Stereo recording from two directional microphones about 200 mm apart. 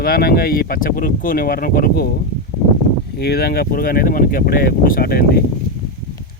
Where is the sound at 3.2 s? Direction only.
50° left (ahead or behind).